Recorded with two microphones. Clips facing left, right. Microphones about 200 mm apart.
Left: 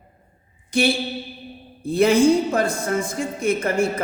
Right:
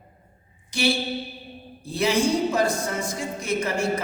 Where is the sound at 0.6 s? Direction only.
55° left (ahead or behind).